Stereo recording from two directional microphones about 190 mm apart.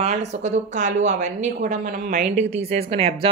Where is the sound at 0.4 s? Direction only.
40° right (ahead or behind).